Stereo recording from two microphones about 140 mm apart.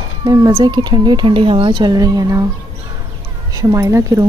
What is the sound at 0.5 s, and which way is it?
A woman's voice, 35° right (ahead or behind).